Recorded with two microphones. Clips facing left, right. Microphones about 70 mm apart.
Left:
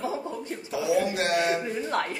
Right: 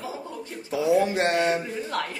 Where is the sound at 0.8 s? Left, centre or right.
Right.